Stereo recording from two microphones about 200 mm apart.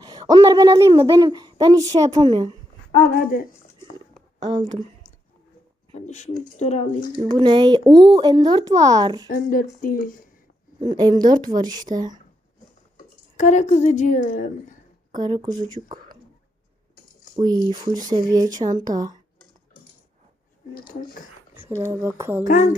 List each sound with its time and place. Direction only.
0.0 s speech: 20° right (ahead or behind)
3.0 s speech: 45° left (ahead or behind)
6.1 s a woman's voice: 35° left (ahead or behind)
7.3 s speech: 25° right (ahead or behind)
9.3 s speech: 45° left (ahead or behind)
10.8 s speech: 20° right (ahead or behind)
13.3 s a woman's voice: 35° left (ahead or behind)
15.1 s speech: 20° right (ahead or behind)
17.3 s speech: 20° right (ahead or behind)
21.8 s speech: 10° right (ahead or behind)
22.4 s a woman's voice: 40° left (ahead or behind)